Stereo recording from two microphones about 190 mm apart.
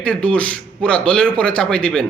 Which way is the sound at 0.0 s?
5° left (ahead or behind).